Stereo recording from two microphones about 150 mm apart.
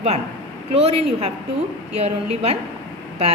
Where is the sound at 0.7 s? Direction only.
45° right (ahead or behind).